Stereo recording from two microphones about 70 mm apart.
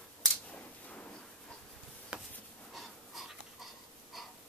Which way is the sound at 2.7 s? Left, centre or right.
Centre.